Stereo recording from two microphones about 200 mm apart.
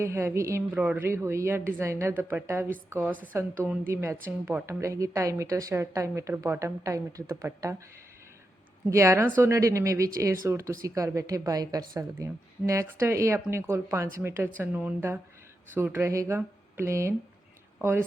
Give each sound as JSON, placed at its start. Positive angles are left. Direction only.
{"t": 0.0, "sound": "a woman's voice", "side_deg": -10}
{"t": 8.9, "sound": "a woman's voice", "side_deg": -15}